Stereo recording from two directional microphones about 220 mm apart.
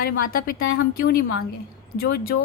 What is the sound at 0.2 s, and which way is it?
A woman's voice, 40° left (ahead or behind).